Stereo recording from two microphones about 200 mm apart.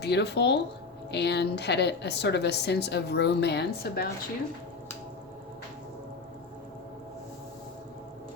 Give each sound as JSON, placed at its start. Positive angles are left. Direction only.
{"t": 0.0, "sound": "a woman's voice", "side_deg": 55}